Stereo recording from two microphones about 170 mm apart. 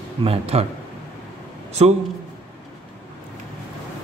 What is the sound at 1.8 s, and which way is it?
Speech, 35° right (ahead or behind).